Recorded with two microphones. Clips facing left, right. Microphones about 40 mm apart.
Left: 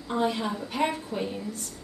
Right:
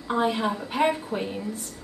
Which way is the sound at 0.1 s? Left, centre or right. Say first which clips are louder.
Right 3 dB; centre.